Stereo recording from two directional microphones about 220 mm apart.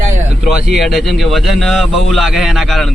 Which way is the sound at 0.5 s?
Centre (ahead or behind).